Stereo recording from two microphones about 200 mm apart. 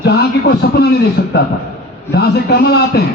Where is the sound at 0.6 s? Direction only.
55° left (ahead or behind).